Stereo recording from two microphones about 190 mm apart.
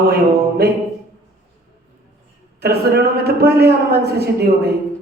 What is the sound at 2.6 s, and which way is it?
A man's voice, 55° right (ahead or behind).